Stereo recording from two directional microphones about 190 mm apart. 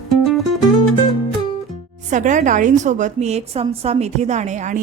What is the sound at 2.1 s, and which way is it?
A woman's voice, 40° right (ahead or behind).